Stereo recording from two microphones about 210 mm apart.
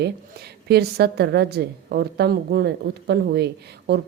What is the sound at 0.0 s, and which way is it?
Speech, 50° right (ahead or behind).